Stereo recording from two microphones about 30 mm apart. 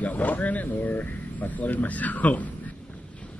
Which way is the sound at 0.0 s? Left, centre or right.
Left.